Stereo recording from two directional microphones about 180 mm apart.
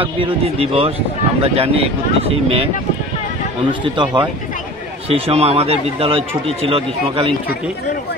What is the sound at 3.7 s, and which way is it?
Speech, 25° right (ahead or behind).